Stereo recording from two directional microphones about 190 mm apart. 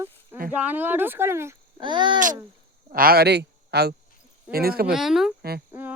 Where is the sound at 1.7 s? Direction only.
25° right (ahead or behind).